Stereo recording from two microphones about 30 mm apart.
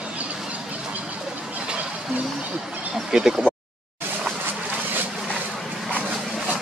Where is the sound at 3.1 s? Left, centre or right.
Right.